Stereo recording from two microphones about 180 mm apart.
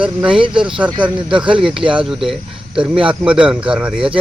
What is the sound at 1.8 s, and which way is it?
Speech, 5° right (ahead or behind).